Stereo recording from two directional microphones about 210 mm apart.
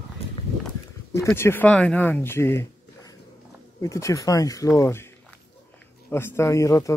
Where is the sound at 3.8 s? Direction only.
15° left (ahead or behind).